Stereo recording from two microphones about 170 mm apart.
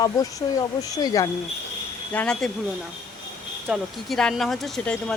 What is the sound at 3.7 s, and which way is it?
Speech, centre (ahead or behind).